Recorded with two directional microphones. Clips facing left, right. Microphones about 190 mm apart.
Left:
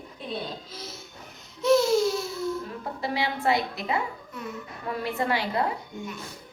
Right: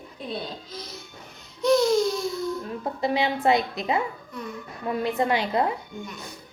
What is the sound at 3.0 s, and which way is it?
A woman's voice, 20° right (ahead or behind).